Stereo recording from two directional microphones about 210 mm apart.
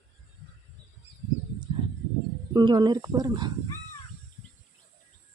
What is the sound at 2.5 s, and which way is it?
Speech, 20° right (ahead or behind).